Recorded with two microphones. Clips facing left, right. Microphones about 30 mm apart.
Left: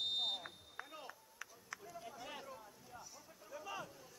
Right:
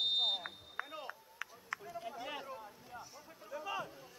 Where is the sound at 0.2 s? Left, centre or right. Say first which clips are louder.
Right 6 dB; right.